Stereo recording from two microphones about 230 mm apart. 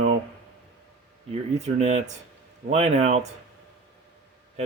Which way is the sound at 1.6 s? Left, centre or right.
Right.